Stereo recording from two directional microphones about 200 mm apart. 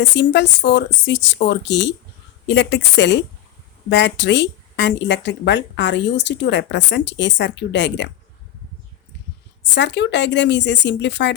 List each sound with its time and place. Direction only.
0.0 s speech: 60° left (ahead or behind)
9.7 s speech: 60° left (ahead or behind)